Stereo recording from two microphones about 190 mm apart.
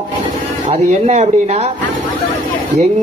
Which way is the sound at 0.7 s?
35° right (ahead or behind).